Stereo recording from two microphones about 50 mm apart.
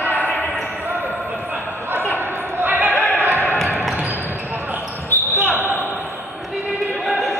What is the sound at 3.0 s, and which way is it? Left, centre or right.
Basketball bounce, left.